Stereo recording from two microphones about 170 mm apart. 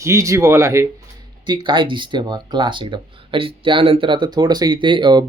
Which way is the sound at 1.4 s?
25° right (ahead or behind).